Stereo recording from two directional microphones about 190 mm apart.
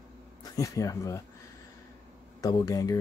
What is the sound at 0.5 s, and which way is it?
Speech, 15° left (ahead or behind).